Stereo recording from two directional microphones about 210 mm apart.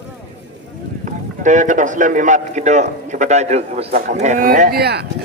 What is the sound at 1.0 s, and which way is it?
A man's voice, 35° right (ahead or behind).